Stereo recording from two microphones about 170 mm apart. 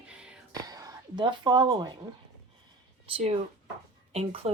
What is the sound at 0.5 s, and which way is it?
Speech, 20° right (ahead or behind).